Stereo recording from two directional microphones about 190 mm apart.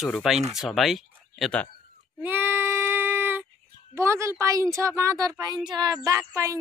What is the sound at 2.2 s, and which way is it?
Child singing, 10° right (ahead or behind).